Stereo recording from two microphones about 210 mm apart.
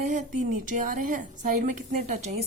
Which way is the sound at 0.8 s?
40° right (ahead or behind).